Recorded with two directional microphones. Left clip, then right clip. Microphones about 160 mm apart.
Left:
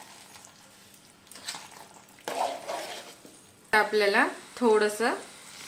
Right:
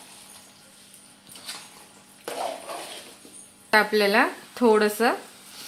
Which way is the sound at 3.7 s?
50° right (ahead or behind).